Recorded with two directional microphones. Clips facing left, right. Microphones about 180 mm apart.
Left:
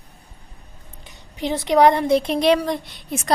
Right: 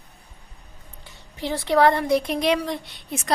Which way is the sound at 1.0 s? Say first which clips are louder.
Left 4 dB; 20° left (ahead or behind).